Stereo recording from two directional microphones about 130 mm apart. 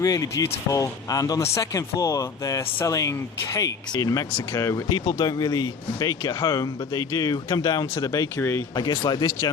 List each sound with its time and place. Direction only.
0.0 s speech: 25° left (ahead or behind)
8.7 s speech: 35° left (ahead or behind)